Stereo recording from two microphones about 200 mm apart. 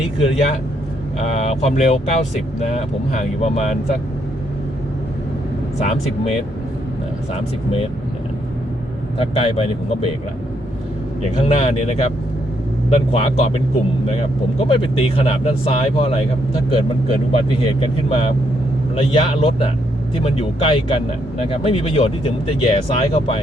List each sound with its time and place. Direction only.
0.2 s speech: 30° left (ahead or behind)
5.8 s speech: 35° left (ahead or behind)
9.1 s speech: 30° left (ahead or behind)
11.4 s speech: 30° left (ahead or behind)
17.6 s speech: 30° left (ahead or behind)